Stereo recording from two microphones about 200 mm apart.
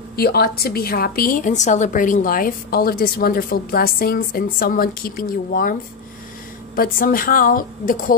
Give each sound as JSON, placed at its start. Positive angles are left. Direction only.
{"t": 0.1, "sound": "a woman's voice", "side_deg": 50}